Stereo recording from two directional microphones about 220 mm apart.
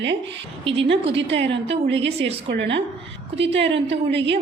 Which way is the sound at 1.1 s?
55° right (ahead or behind).